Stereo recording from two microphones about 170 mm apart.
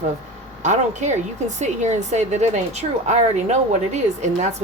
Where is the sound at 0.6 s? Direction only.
45° right (ahead or behind).